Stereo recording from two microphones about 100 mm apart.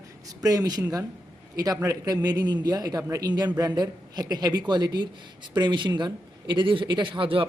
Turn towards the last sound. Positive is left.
turn(degrees=-60)  # may be behind; listen again after turning